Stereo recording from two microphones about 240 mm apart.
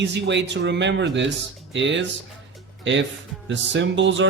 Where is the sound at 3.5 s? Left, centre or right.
Right.